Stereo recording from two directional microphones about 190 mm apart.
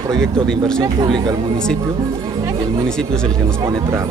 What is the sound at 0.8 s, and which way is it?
Speech, 20° right (ahead or behind).